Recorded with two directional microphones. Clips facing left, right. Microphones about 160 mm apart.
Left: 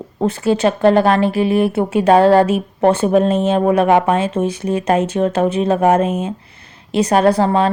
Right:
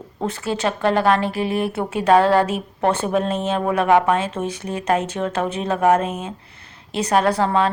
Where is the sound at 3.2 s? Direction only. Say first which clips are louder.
Left 7 dB; 15° left (ahead or behind).